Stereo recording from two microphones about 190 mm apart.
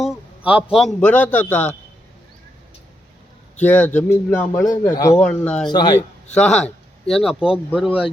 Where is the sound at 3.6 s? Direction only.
10° left (ahead or behind).